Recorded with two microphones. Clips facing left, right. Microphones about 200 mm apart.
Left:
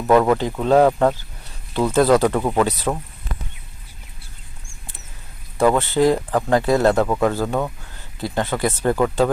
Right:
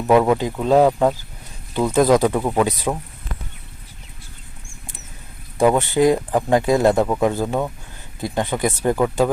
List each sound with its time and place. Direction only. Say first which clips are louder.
0.1 s speech: even; 10° right (ahead or behind)
5.5 s speech: right 1 dB; 15° right (ahead or behind)